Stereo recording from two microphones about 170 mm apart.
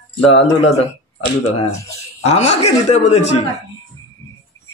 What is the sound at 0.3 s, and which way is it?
Speech, 40° left (ahead or behind).